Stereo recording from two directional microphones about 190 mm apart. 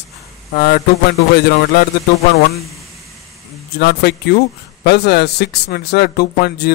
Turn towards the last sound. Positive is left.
turn(degrees=60)  # may be behind; listen again after turning